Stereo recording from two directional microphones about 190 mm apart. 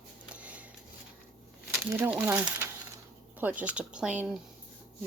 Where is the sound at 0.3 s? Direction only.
5° right (ahead or behind).